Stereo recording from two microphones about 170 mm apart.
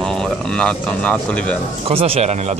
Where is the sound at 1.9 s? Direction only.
35° right (ahead or behind).